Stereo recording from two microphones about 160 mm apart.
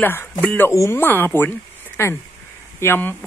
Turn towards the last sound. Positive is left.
turn(degrees=15)  # may be behind; listen again after turning